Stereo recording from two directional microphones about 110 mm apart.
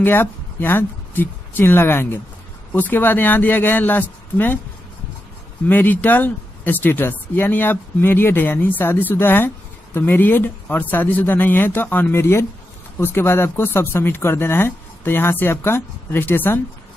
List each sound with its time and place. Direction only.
0.0 s speech: 20° left (ahead or behind)
5.7 s speech: 15° left (ahead or behind)